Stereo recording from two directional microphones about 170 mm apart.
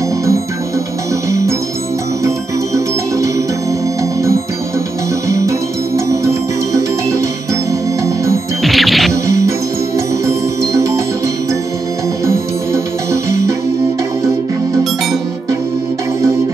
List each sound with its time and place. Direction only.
2.2 s music: 20° right (ahead or behind)
5.9 s music: 20° right (ahead or behind)
8.6 s music: centre (ahead or behind)
10.2 s music: 20° right (ahead or behind)
12.3 s music: 15° right (ahead or behind)